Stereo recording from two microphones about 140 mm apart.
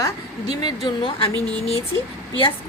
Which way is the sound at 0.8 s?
40° left (ahead or behind).